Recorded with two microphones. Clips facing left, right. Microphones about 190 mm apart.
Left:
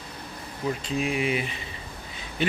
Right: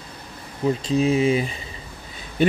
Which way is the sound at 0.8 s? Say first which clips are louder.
Right 9 dB; 35° right (ahead or behind).